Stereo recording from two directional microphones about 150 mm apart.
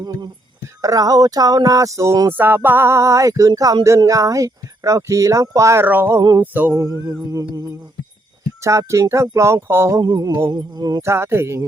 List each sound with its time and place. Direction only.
0.0 s speech: 25° right (ahead or behind)